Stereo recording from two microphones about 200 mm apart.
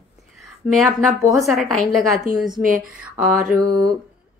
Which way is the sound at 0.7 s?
Centre (ahead or behind).